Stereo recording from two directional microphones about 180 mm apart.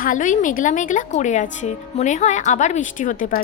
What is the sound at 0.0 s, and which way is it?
A woman's voice, 45° left (ahead or behind).